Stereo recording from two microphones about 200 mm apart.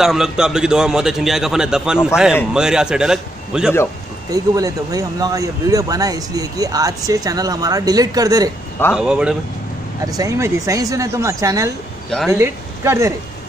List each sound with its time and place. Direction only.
0.0 s a man's voice: centre (ahead or behind)
4.3 s speech: 15° right (ahead or behind)
8.9 s a man's voice: 5° right (ahead or behind)
10.0 s speech: 15° right (ahead or behind)